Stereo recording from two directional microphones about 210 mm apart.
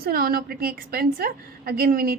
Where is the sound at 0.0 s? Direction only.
45° right (ahead or behind).